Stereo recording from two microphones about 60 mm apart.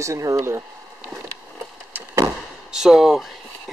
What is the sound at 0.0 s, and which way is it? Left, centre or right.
Speech, right.